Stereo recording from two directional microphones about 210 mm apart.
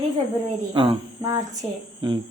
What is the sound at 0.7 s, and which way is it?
Speech, 20° right (ahead or behind).